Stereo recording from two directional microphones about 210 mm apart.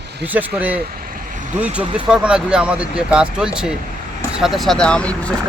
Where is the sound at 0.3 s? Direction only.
5° right (ahead or behind).